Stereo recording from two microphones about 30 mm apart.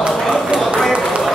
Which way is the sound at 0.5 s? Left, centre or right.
Centre.